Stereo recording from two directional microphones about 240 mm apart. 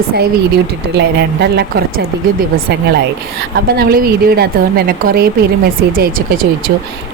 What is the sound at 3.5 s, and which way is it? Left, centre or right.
A woman's voice, right.